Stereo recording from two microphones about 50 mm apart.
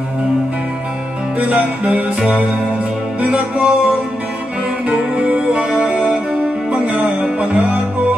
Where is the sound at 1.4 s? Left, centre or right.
Right.